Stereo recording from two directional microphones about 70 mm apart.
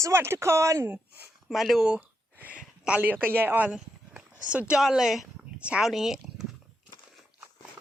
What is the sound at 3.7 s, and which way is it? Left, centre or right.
Speech, centre.